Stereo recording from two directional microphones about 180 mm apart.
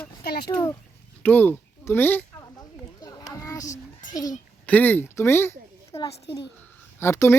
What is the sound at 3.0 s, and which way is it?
Children playing, 20° left (ahead or behind).